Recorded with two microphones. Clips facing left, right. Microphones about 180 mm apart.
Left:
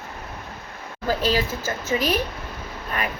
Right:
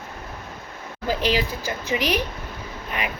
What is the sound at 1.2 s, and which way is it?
Speech, 15° right (ahead or behind).